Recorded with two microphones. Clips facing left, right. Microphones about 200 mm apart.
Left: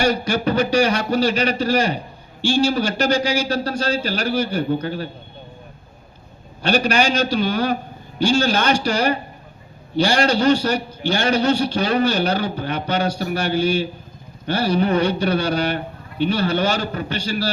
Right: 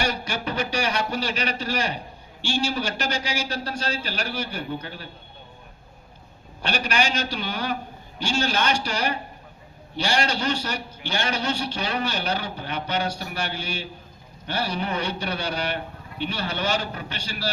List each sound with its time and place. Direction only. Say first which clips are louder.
0.0 s a man's voice: left 9 dB; 35° left (ahead or behind)
6.6 s a man's voice: left 7 dB; 35° left (ahead or behind)